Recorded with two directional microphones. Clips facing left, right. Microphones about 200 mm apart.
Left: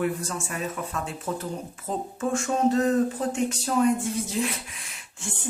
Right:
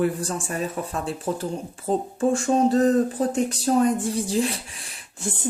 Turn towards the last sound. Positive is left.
turn(degrees=-35)  # may be behind; listen again after turning